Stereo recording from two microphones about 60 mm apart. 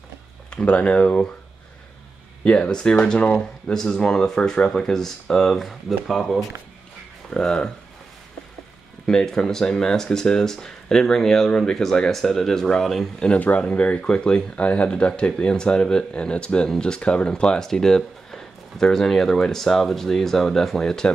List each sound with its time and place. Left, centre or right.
0.5 s speech: centre
2.4 s speech: left; by 6.4 s centre
7.2 s speech: centre
9.0 s speech: centre
13.4 s speech: left